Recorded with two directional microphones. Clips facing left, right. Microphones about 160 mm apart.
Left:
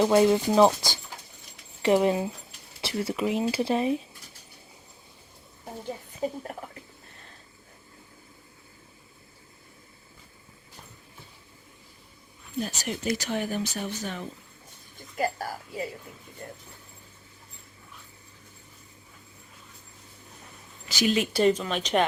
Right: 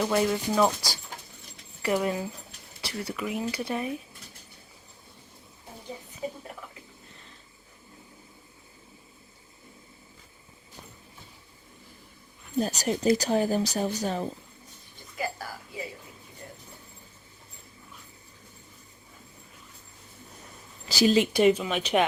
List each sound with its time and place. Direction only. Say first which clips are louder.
0.0 s speech: left 5 dB; 25° left (ahead or behind)
12.5 s speech: right 5 dB; 40° right (ahead or behind)
15.1 s a woman's voice: left 5 dB; 45° left (ahead or behind)
16.4 s a sound: left 4 dB; 50° left (ahead or behind)
20.8 s speech: right 3 dB; 35° right (ahead or behind)
21.3 s speech: right 1 dB; 10° right (ahead or behind)